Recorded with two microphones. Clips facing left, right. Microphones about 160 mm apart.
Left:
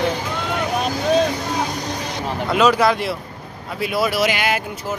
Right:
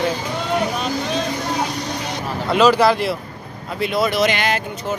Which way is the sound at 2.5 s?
Centre (ahead or behind).